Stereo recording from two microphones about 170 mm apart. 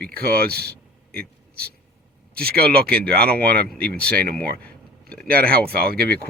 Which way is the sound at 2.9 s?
5° left (ahead or behind).